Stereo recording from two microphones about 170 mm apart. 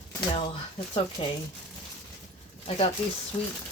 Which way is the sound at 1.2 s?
30° left (ahead or behind).